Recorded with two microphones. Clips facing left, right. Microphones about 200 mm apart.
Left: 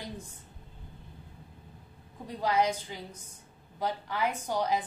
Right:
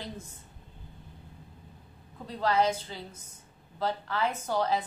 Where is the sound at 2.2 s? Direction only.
15° left (ahead or behind).